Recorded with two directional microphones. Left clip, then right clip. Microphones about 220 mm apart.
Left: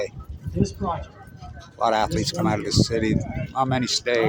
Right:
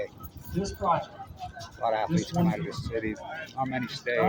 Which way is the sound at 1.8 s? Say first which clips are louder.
Left 7 dB; 50° left (ahead or behind).